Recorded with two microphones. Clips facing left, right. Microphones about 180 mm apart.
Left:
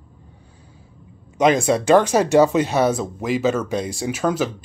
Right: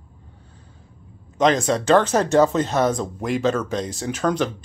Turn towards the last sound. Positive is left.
turn(degrees=5)  # may be behind; listen again after turning